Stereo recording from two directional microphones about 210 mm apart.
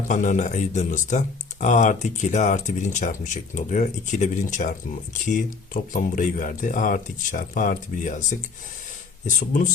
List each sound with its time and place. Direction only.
0.1 s speech: 35° left (ahead or behind)